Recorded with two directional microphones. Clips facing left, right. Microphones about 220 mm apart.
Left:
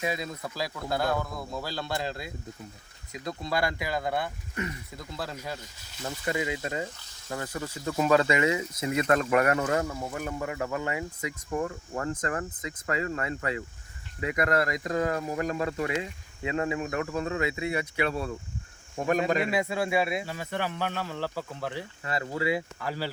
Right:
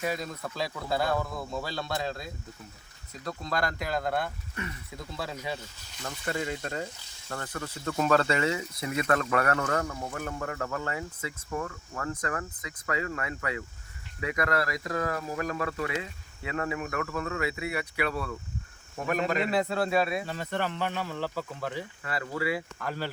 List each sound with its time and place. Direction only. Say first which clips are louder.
0.0 s speech: even; 15° left (ahead or behind); by 5.5 s centre (ahead or behind)
6.0 s speech: left 2 dB; 10° left (ahead or behind)
11.6 s speech: left 4 dB; 30° left (ahead or behind)
19.3 s speech: left 1 dB; 10° left (ahead or behind)
22.0 s speech: left 3 dB; 20° left (ahead or behind)
22.8 s speech: left 1 dB; 10° left (ahead or behind)